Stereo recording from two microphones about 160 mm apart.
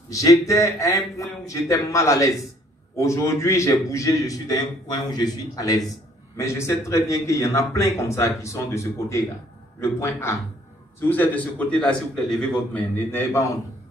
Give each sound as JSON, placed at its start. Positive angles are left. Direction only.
{"t": 0.1, "sound": "a man's voice", "side_deg": 20}